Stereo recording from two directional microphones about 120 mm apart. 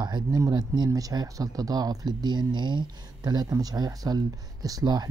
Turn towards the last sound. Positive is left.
turn(degrees=-35)  # may be behind; listen again after turning